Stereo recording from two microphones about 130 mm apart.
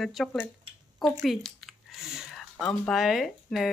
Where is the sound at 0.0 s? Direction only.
5° left (ahead or behind).